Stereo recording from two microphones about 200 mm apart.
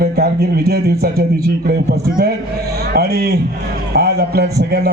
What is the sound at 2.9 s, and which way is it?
A man's voice, 50° right (ahead or behind).